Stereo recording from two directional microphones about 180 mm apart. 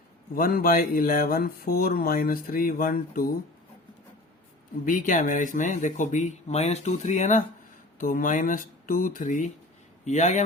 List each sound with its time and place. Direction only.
0.3 s speech: 55° left (ahead or behind)
4.9 s speech: 45° left (ahead or behind)